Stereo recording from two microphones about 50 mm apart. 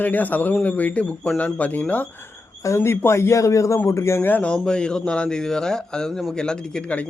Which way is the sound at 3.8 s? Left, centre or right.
Left.